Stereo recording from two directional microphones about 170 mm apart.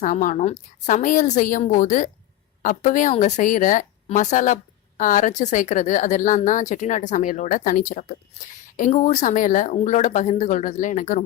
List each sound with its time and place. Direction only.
0.0 s a woman's voice: 50° left (ahead or behind)